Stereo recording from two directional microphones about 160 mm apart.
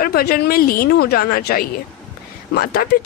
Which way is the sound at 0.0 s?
70° left (ahead or behind).